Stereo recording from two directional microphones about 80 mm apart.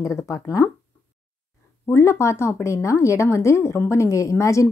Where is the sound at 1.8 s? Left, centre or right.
Left.